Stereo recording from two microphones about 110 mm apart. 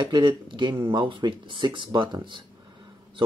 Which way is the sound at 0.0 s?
45° right (ahead or behind).